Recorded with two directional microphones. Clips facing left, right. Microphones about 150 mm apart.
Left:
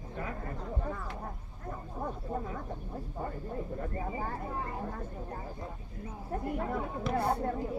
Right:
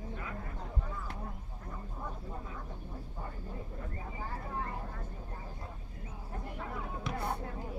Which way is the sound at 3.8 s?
50° left (ahead or behind).